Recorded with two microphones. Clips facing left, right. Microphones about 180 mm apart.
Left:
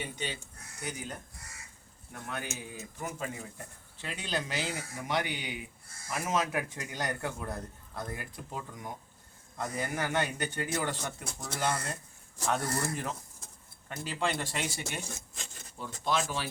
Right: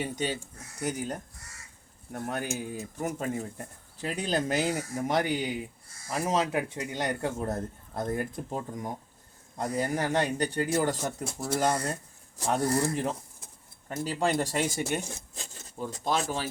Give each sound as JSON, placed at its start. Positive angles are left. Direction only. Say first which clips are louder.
{"t": 0.0, "sound": "a man's voice", "louder": "right 7 dB", "side_deg": -40}
{"t": 7.3, "sound": "a man's voice", "louder": "right 7 dB", "side_deg": -45}